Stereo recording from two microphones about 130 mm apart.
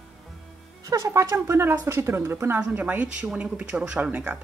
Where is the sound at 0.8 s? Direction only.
25° right (ahead or behind).